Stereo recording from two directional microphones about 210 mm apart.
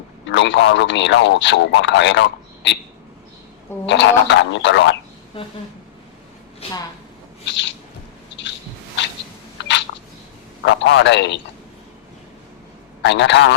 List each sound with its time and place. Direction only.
0.3 s speech: 60° left (ahead or behind)
3.8 s speech: 60° left (ahead or behind)
5.3 s speech: 25° left (ahead or behind)
7.4 s owl: 60° left (ahead or behind)
10.6 s speech: 60° left (ahead or behind)
13.0 s speech: 55° left (ahead or behind)